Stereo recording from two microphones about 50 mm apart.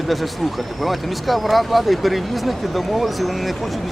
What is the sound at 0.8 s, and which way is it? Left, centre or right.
Speech, centre.